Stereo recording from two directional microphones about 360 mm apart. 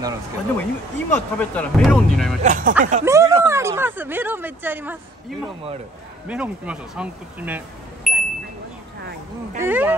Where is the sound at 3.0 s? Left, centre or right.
Centre.